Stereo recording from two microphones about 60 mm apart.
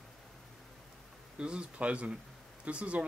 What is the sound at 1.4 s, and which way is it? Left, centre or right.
Speech, centre.